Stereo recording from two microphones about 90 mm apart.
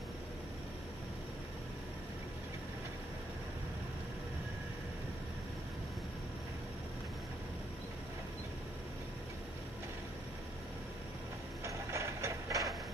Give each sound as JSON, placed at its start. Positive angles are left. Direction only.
{"t": 11.6, "sound": "mechanisms", "side_deg": -35}